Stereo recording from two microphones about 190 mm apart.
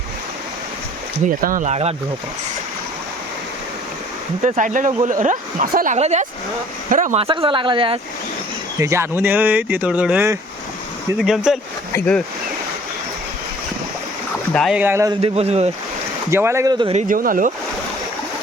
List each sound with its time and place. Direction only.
1.4 s speech: 45° right (ahead or behind)
4.4 s speech: 40° right (ahead or behind)
7.3 s speech: 25° right (ahead or behind)
8.8 s speech: 15° right (ahead or behind); by 12.2 s 5° left (ahead or behind)
14.5 s speech: centre (ahead or behind)
14.8 s speech: 15° right (ahead or behind)
15.2 s speech: 35° right (ahead or behind)
16.3 s speech: 15° right (ahead or behind)
16.7 s speech: 25° right (ahead or behind)
17.1 s speech: 45° right (ahead or behind)